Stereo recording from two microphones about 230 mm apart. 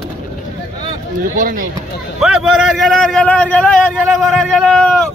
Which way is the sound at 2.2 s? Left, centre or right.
Centre.